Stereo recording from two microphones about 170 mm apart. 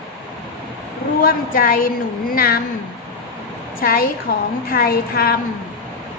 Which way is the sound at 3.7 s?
60° left (ahead or behind).